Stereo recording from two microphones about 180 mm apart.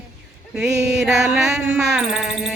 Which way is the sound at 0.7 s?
70° right (ahead or behind).